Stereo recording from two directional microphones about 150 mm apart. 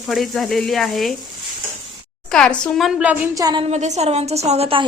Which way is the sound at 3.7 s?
50° right (ahead or behind).